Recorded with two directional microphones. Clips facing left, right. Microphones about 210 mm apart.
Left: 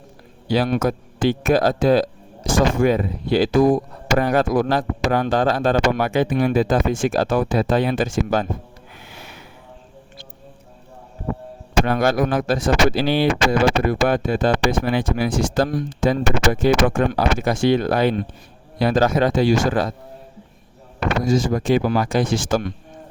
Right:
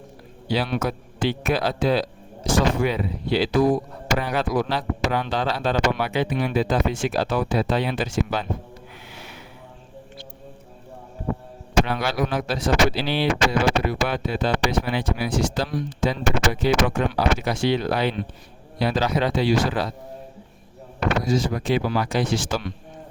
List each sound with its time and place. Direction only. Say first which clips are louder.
0.4 s speech: left 5 dB; 45° left (ahead or behind)
11.9 s speech: left 6 dB; 50° left (ahead or behind)
21.2 s speech: left 8 dB; 45° left (ahead or behind)